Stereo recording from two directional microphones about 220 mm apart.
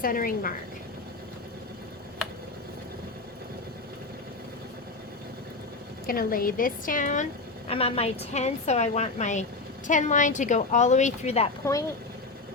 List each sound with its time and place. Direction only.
0.0 s a woman's voice: 40° left (ahead or behind)
6.1 s a woman's voice: 40° left (ahead or behind)
11.6 s speech: 15° left (ahead or behind)